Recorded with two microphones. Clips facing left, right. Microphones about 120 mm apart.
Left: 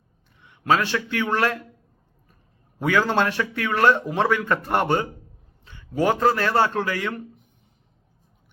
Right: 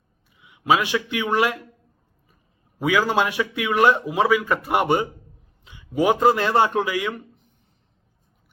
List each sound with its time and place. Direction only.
0.3 s speech: 5° right (ahead or behind)
2.7 s a man's voice: 5° right (ahead or behind)